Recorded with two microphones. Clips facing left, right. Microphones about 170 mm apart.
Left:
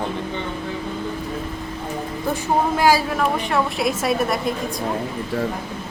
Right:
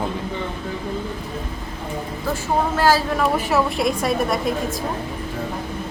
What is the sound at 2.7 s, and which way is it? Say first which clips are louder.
Speech: even; 15° left (ahead or behind).